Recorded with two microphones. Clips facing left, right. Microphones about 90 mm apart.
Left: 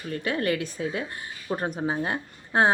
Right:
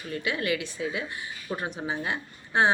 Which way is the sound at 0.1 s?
40° left (ahead or behind).